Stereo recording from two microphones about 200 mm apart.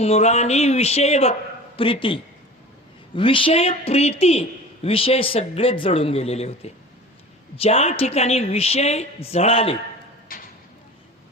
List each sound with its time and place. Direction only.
0.0 s a man's voice: 30° left (ahead or behind)
10.3 s clip-clop: 45° left (ahead or behind)